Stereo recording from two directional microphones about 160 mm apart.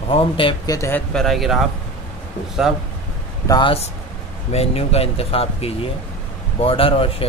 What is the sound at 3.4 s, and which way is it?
Speech, 25° left (ahead or behind).